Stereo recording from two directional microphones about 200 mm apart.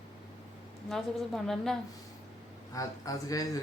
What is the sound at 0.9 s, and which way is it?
Speech, centre (ahead or behind).